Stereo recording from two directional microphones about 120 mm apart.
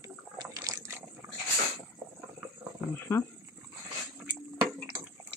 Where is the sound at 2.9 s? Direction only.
20° left (ahead or behind).